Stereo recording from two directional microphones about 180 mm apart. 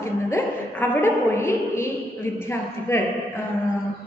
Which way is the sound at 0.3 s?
15° left (ahead or behind).